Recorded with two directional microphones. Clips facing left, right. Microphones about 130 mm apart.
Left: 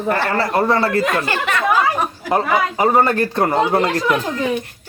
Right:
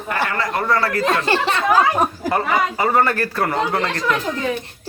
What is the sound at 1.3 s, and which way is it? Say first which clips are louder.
Speech: right 2 dB; 30° right (ahead or behind).